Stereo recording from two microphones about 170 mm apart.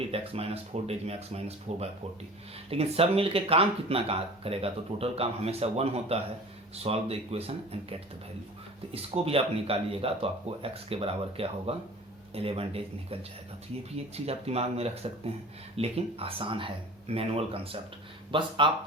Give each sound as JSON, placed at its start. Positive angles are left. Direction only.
{"t": 0.1, "sound": "speech", "side_deg": -35}
{"t": 14.3, "sound": "speech", "side_deg": -35}